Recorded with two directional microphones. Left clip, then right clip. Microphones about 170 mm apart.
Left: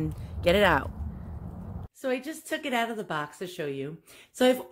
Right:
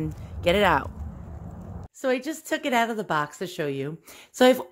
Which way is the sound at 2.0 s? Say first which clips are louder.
Right 5 dB; 30° right (ahead or behind).